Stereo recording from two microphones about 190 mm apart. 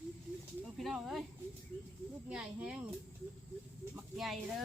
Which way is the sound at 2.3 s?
5° right (ahead or behind).